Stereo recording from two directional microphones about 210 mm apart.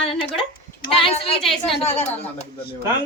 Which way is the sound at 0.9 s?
25° left (ahead or behind).